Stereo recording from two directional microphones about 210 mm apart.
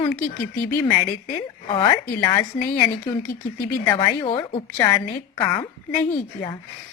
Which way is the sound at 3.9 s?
25° left (ahead or behind).